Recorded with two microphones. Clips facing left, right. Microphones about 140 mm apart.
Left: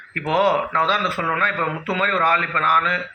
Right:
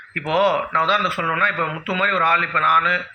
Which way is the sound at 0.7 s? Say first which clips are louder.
Even; 40° left (ahead or behind).